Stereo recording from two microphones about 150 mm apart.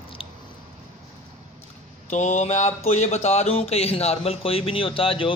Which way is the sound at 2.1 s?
50° left (ahead or behind).